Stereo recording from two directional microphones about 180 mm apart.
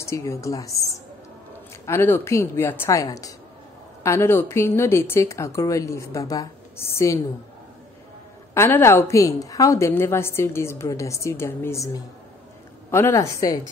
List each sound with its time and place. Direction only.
0.0 s a woman's voice: 15° left (ahead or behind)
1.9 s a woman's voice: 15° left (ahead or behind)
8.5 s a woman's voice: 15° left (ahead or behind)